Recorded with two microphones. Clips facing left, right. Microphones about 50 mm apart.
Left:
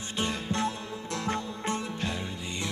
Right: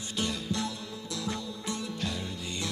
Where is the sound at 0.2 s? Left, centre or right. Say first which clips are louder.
Left 3 dB; left.